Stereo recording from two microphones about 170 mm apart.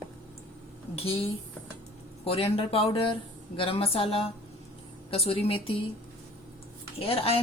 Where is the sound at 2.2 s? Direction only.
35° left (ahead or behind).